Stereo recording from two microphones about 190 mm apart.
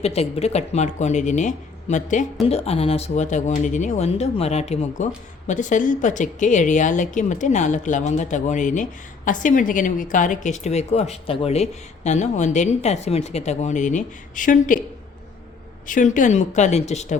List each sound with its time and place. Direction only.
0.0 s speech: 35° left (ahead or behind)
15.9 s speech: 45° left (ahead or behind)